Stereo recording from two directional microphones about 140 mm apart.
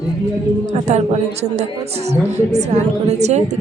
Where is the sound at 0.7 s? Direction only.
55° right (ahead or behind).